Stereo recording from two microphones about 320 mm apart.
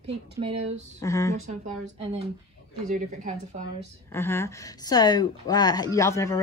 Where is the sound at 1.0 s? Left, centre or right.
Centre.